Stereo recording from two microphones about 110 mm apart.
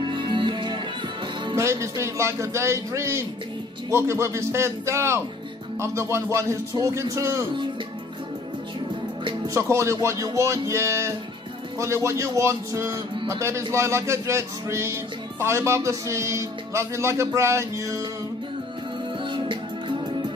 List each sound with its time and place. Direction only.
0.0 s music: 50° right (ahead or behind)
1.5 s speech: 25° right (ahead or behind)
9.5 s speech: 25° right (ahead or behind)
19.3 s music: 50° right (ahead or behind)